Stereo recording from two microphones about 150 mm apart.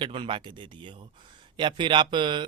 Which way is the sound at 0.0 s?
35° right (ahead or behind).